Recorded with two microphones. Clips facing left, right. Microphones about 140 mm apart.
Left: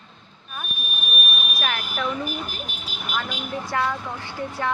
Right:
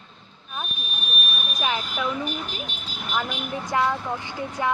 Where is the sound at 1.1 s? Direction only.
10° left (ahead or behind).